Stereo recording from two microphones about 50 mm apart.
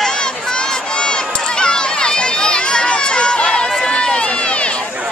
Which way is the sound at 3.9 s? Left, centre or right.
Centre.